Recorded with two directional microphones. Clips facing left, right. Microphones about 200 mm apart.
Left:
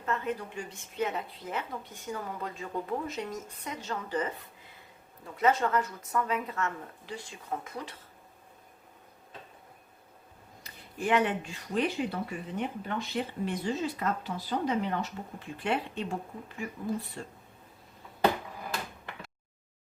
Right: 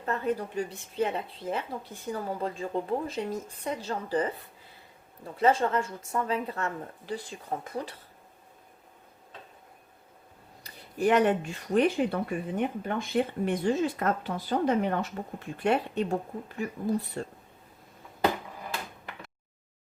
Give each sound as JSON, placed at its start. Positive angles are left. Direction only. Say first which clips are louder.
{"t": 0.0, "sound": "a woman's voice", "louder": "right 3 dB", "side_deg": -35}
{"t": 10.6, "sound": "speech", "louder": "right 7 dB", "side_deg": -40}
{"t": 17.2, "sound": "speech", "louder": "right 6 dB", "side_deg": -45}